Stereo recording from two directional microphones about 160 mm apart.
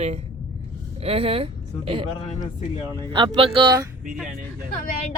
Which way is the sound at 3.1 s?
30° right (ahead or behind).